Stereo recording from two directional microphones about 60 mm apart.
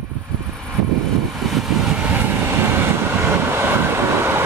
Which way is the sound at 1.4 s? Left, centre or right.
Centre.